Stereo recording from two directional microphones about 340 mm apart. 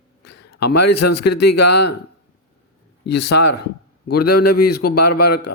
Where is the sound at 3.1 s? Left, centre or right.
Left.